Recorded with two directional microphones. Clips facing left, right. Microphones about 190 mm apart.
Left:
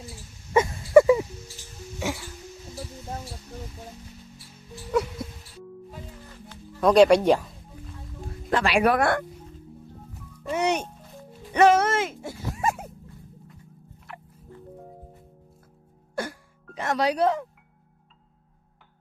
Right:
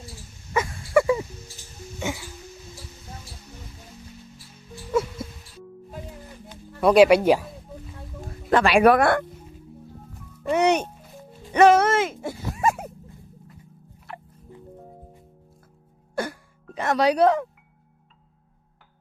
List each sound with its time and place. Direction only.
0.5 s a sound: 25° left (ahead or behind)
2.0 s music: centre (ahead or behind)
4.7 s music: centre (ahead or behind)
6.5 s speech: 10° right (ahead or behind)
8.4 s speech: 60° right (ahead or behind)
10.5 s music: 65° right (ahead or behind)
14.1 s music: 30° right (ahead or behind)
16.7 s speech: 65° right (ahead or behind)